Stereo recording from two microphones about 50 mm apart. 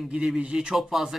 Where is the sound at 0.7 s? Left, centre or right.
Centre.